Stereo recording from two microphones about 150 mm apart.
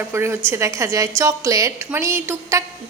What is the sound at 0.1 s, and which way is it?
A woman's voice, 15° right (ahead or behind).